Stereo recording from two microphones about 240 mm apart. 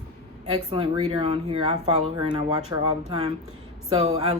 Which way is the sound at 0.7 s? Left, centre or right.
Centre.